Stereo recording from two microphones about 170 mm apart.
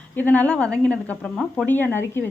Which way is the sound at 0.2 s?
10° left (ahead or behind).